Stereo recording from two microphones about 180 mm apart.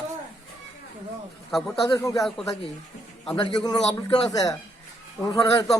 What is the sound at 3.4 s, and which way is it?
A man's voice, 20° left (ahead or behind).